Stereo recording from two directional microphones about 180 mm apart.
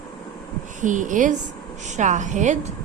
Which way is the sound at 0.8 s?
45° right (ahead or behind).